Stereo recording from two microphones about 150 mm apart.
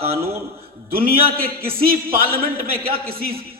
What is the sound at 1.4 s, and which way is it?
Speech, 80° right.